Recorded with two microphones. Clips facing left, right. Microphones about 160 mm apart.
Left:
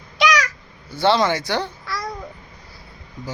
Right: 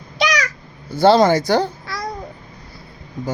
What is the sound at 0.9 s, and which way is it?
Speech, 40° right (ahead or behind).